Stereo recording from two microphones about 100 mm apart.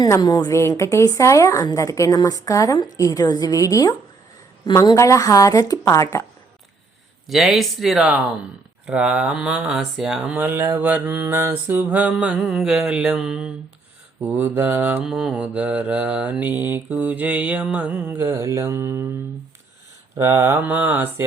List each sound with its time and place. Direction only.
0.2 s a woman's voice: 40° left (ahead or behind)
7.3 s speech: centre (ahead or behind)
8.9 s mantra: 10° right (ahead or behind)
10.2 s mantra: 20° right (ahead or behind)
14.2 s mantra: 20° right (ahead or behind)
15.0 s mantra: 5° right (ahead or behind); by 19.0 s 25° right (ahead or behind)
20.1 s mantra: 30° right (ahead or behind)